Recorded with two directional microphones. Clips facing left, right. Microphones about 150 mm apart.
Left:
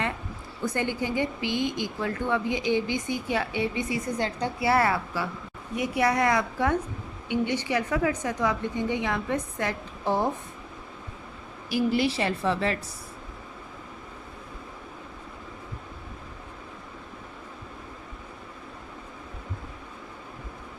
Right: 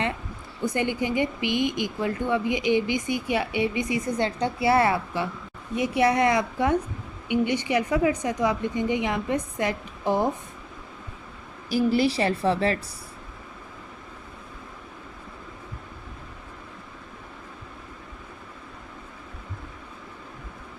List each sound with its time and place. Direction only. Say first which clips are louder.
0.6 s a woman's voice: right 3 dB; 15° right (ahead or behind)
11.7 s a woman's voice: right 3 dB; 35° right (ahead or behind)